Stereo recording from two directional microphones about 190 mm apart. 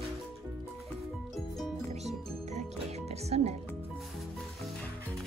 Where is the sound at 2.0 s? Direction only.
35° right (ahead or behind).